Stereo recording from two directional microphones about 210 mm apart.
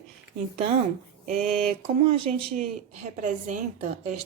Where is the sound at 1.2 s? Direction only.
35° right (ahead or behind).